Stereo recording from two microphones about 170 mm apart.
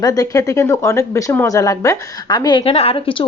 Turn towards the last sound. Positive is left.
turn(degrees=30)  # may be behind; listen again after turning